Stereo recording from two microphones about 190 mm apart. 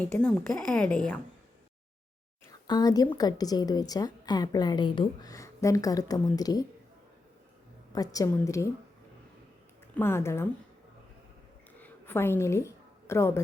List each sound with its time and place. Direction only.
0.0 s a woman's voice: 5° left (ahead or behind)
2.5 s a woman's voice: 20° left (ahead or behind)
7.9 s a woman's voice: 20° left (ahead or behind)
9.9 s a woman's voice: 10° left (ahead or behind)
11.8 s a sound: 10° left (ahead or behind)